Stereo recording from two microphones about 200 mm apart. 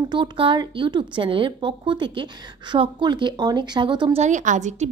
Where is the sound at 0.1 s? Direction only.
25° right (ahead or behind).